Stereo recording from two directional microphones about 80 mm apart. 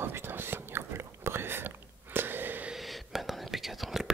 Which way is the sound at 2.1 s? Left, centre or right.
Right.